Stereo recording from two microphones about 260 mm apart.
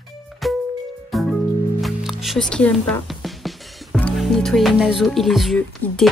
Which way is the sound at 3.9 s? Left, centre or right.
Centre.